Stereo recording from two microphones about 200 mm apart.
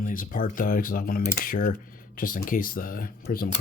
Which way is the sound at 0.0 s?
45° left (ahead or behind).